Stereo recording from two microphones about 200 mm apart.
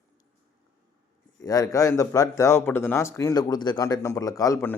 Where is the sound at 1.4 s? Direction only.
15° left (ahead or behind).